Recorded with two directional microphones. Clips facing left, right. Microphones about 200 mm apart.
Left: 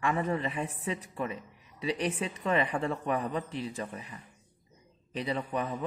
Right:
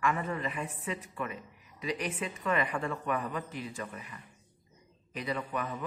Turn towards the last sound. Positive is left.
turn(degrees=30)  # may be behind; listen again after turning